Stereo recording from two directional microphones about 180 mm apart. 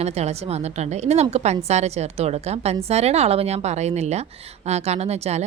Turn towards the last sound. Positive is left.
turn(degrees=-35)  # may be behind; listen again after turning